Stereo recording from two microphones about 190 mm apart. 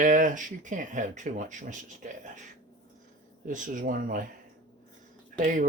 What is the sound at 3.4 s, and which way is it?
Speech, 45° right (ahead or behind).